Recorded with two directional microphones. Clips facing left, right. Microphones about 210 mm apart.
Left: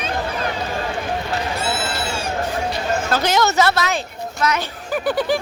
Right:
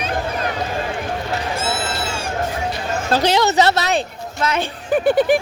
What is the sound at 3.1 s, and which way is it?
Speech, 30° right (ahead or behind).